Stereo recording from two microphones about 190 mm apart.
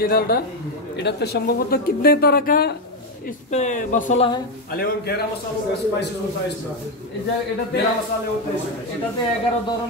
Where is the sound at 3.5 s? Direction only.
40° left (ahead or behind).